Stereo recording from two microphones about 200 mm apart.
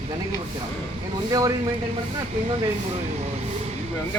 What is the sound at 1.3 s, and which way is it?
Speech, 20° right (ahead or behind).